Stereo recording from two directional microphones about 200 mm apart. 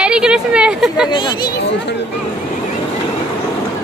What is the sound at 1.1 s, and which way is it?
Speech, 25° left (ahead or behind).